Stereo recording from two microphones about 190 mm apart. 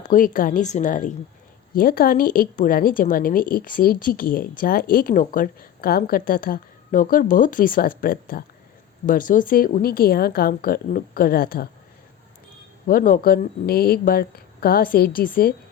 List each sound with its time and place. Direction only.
0.1 s a woman's voice: 45° left (ahead or behind)
12.9 s a woman's voice: 50° left (ahead or behind)